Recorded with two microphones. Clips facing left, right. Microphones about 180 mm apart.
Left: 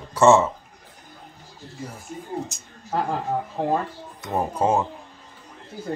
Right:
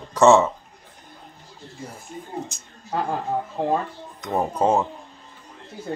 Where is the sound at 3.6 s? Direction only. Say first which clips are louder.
Right 1 dB; 5° left (ahead or behind).